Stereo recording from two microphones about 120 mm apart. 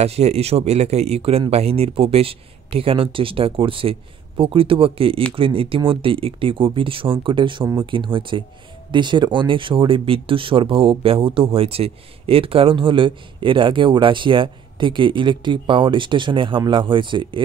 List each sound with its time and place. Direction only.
0.0 s speech: 60° right (ahead or behind); by 17.4 s 45° right (ahead or behind)